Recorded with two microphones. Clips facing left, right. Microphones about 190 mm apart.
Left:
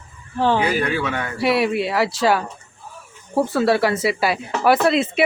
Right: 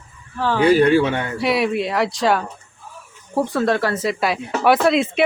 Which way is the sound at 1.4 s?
Centre (ahead or behind).